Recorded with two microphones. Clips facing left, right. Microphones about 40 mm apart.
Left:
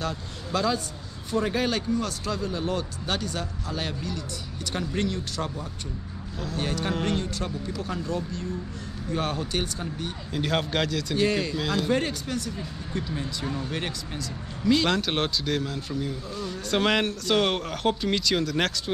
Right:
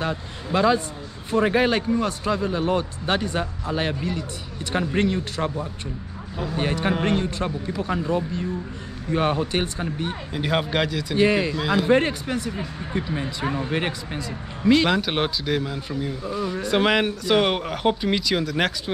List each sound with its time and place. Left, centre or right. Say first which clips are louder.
0.0 s speech: right 4 dB; right
10.3 s speech: right 2 dB; centre
14.9 s speech: right 3 dB; centre